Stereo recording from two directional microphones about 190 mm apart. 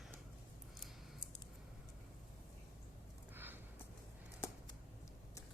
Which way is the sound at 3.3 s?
10° right (ahead or behind).